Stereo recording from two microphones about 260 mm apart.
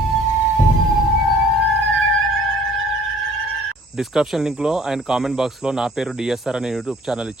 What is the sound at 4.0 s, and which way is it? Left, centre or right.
Speech, centre.